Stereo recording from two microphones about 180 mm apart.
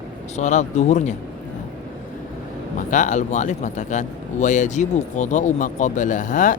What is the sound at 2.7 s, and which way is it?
Speech, 45° left (ahead or behind).